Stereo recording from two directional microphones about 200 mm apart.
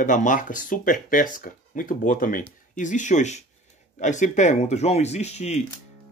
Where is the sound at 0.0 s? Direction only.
40° left (ahead or behind).